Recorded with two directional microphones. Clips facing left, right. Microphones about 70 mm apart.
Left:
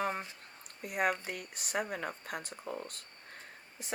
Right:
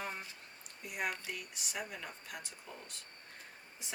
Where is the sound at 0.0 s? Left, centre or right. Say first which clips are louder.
Left 8 dB; left.